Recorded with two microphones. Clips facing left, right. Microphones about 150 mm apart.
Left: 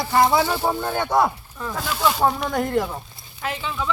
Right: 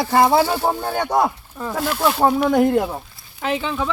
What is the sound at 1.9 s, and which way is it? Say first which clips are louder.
Speech: right 3 dB; 5° right (ahead or behind).